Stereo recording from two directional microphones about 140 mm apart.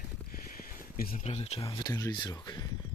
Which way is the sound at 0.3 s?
90° left.